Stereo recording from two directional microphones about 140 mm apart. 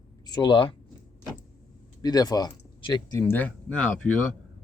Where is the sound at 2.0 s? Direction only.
30° left (ahead or behind).